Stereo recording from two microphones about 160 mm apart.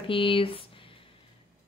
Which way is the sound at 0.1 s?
35° left (ahead or behind).